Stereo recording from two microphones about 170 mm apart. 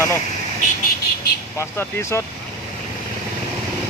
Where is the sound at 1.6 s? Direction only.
15° left (ahead or behind).